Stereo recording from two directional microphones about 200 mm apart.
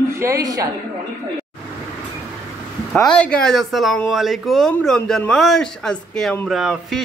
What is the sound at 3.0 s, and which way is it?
Speech, 5° left (ahead or behind).